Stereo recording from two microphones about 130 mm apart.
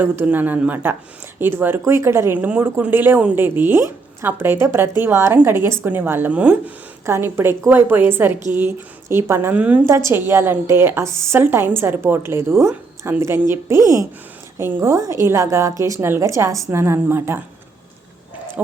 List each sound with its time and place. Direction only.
0.0 s speech: 15° right (ahead or behind)
9.8 s a woman's voice: 20° right (ahead or behind)